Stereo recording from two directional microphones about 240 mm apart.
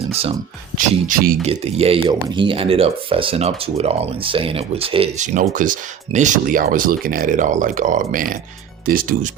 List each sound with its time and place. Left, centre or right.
0.8 s speech: right
1.5 s speech: right